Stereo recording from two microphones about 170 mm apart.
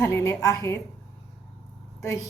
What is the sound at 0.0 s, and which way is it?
Speech, 20° left (ahead or behind).